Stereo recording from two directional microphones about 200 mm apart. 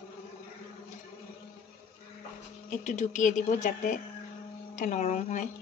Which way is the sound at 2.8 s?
35° left (ahead or behind).